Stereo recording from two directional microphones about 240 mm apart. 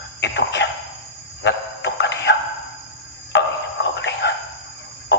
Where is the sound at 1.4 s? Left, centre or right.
Left.